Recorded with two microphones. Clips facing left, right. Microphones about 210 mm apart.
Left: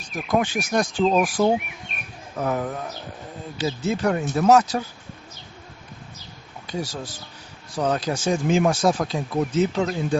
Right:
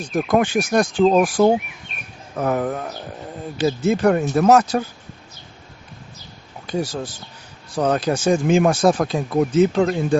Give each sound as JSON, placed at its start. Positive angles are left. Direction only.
{"t": 0.1, "sound": "speech", "side_deg": -50}
{"t": 7.8, "sound": "speech", "side_deg": -60}